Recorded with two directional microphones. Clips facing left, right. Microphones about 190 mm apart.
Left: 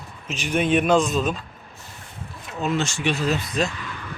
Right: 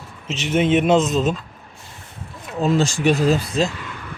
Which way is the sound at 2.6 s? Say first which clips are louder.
Right 6 dB; 35° right (ahead or behind).